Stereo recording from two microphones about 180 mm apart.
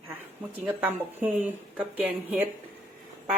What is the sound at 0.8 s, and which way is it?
A woman's voice, 10° right (ahead or behind).